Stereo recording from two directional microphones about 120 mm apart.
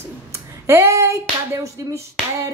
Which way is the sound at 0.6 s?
20° right (ahead or behind).